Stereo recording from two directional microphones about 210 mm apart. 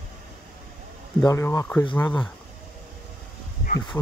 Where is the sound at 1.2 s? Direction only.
15° left (ahead or behind).